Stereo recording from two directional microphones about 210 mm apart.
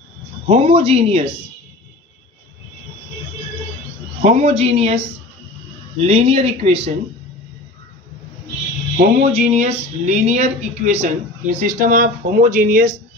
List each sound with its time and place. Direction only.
0.5 s a man's voice: 30° right (ahead or behind)
4.2 s speech: 30° right (ahead or behind)
8.9 s speech: 35° right (ahead or behind)